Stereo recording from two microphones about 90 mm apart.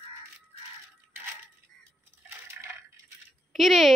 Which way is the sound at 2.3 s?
30° right (ahead or behind).